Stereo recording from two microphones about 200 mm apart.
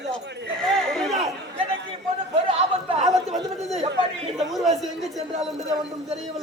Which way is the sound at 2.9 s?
35° right (ahead or behind).